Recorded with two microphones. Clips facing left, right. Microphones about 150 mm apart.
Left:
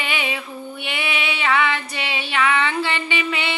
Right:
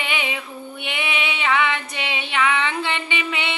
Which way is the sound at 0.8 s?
20° right (ahead or behind).